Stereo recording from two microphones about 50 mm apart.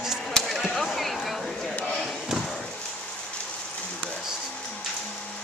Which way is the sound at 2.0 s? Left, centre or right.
Centre.